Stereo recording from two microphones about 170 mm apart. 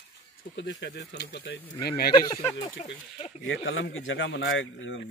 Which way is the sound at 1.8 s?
65° left (ahead or behind).